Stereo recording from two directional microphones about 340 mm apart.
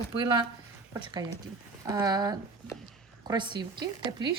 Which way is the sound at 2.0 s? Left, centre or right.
Centre.